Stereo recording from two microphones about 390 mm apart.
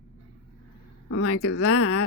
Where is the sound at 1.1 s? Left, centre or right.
Left.